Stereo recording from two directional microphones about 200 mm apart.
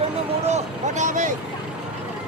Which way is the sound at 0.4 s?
35° right (ahead or behind).